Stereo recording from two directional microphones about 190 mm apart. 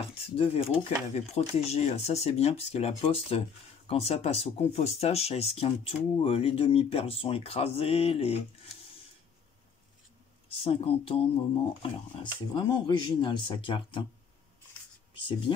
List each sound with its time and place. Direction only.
0.4 s speech: 30° left (ahead or behind)
10.5 s speech: 30° left (ahead or behind)
15.1 s speech: 25° left (ahead or behind)